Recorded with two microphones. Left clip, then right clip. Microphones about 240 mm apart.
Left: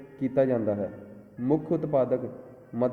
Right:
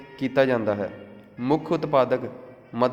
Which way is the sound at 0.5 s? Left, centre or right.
Right.